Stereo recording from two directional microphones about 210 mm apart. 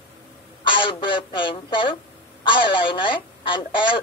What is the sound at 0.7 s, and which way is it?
A woman's voice, 25° left (ahead or behind).